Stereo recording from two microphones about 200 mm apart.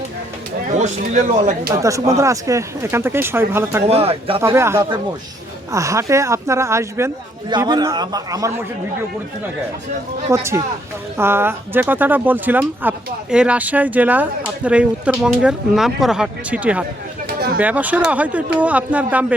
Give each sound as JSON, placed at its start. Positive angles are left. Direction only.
{"t": 0.8, "sound": "speech", "side_deg": -35}
{"t": 1.7, "sound": "speech", "side_deg": -15}
{"t": 3.8, "sound": "speech", "side_deg": -30}
{"t": 4.4, "sound": "a man's voice", "side_deg": -15}
{"t": 10.2, "sound": "speech", "side_deg": -15}